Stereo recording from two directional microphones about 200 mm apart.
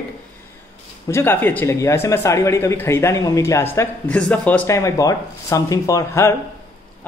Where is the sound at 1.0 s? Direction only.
10° left (ahead or behind).